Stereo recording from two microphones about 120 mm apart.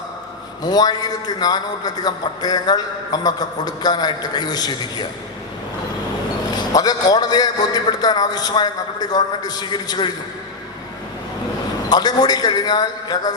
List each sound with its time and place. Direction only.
0.6 s a man's voice: 35° left (ahead or behind)
6.6 s a man's voice: 35° left (ahead or behind)
11.9 s a man's voice: 35° left (ahead or behind)